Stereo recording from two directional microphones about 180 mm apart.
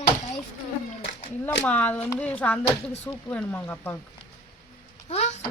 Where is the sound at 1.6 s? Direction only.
10° left (ahead or behind).